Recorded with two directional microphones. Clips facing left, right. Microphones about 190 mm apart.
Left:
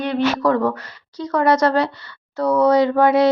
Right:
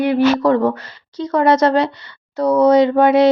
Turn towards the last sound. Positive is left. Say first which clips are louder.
# right 3 dB
turn(degrees=-20)  # may be behind; listen again after turning